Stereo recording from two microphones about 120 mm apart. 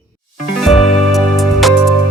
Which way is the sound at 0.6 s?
Centre (ahead or behind).